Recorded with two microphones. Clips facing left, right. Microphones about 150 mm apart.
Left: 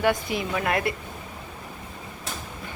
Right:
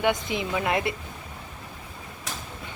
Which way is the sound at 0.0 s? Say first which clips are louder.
Left 1 dB; 20° right (ahead or behind).